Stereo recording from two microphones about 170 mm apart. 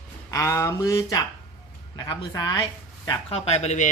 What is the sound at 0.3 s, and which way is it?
Speech, 20° left (ahead or behind).